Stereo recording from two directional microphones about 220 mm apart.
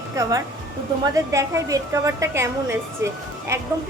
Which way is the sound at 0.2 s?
15° right (ahead or behind).